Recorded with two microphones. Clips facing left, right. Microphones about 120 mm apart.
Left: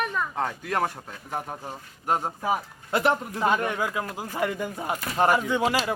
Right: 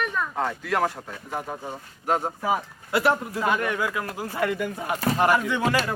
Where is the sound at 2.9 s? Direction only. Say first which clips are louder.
Right 1 dB; 20° left (ahead or behind).